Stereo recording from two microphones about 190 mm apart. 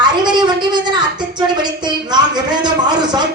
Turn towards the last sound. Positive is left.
turn(degrees=-20)  # may be behind; listen again after turning